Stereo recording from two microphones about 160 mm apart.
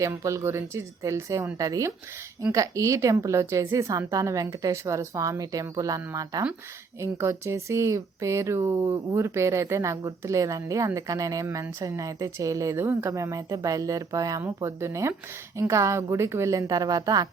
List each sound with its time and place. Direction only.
0.0 s speech: 20° right (ahead or behind)